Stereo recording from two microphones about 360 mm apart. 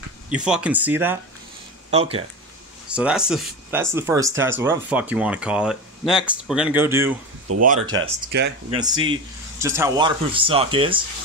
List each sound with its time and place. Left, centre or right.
0.3 s speech: centre
1.9 s speech: centre
2.9 s speech: centre
8.3 s speech: right
8.7 s speech: centre